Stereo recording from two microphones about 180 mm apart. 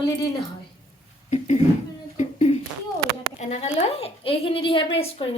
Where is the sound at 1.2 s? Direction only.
40° left (ahead or behind).